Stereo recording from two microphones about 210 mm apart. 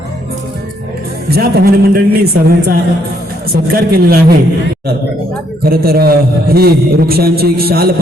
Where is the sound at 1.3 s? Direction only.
45° right (ahead or behind).